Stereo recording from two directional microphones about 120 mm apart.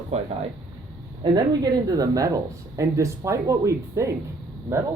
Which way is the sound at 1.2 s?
30° right (ahead or behind).